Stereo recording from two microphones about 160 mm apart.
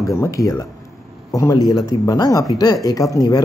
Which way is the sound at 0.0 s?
20° left (ahead or behind).